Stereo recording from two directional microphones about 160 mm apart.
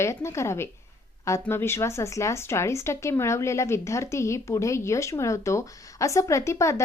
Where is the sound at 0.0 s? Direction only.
15° left (ahead or behind).